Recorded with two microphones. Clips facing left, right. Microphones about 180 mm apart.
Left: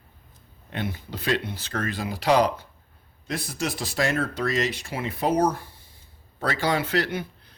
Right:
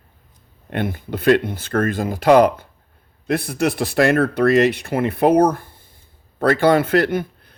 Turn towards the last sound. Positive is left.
turn(degrees=-50)  # may be behind; listen again after turning